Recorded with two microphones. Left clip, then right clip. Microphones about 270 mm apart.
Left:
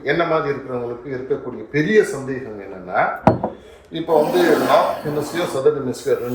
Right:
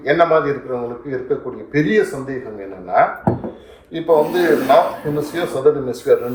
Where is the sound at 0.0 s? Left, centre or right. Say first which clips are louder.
Right 5 dB; centre.